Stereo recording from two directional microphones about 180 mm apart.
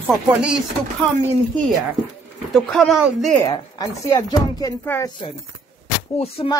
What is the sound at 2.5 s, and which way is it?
Speech, 5° left (ahead or behind).